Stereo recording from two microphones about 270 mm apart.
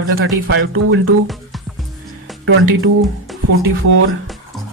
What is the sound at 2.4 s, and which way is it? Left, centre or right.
Speech, right.